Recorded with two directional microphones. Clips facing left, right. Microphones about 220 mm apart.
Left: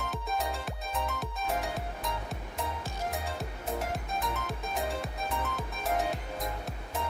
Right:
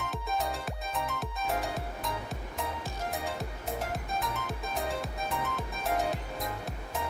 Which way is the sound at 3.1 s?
Centre (ahead or behind).